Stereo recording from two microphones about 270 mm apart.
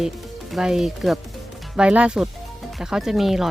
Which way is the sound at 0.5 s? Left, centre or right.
Centre.